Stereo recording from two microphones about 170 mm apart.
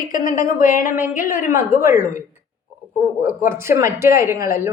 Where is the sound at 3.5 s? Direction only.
15° right (ahead or behind).